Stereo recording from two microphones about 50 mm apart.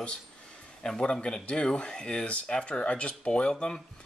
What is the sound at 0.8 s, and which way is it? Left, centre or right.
Speech, centre.